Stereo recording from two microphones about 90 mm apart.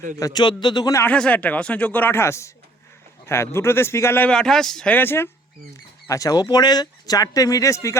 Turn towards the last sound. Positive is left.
turn(degrees=35)  # may be behind; listen again after turning